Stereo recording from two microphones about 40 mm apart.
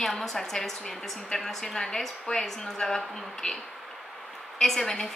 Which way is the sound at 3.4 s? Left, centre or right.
Left.